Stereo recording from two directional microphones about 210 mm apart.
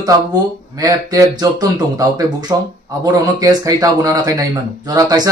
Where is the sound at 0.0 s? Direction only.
15° right (ahead or behind).